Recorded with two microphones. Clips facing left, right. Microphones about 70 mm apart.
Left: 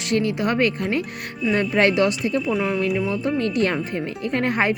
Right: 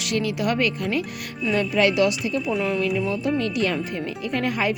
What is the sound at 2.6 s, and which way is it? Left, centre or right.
Speech, left.